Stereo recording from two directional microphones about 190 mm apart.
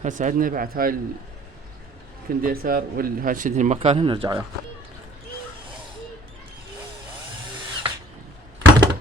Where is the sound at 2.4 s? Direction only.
50° right (ahead or behind); by 4.4 s 25° right (ahead or behind).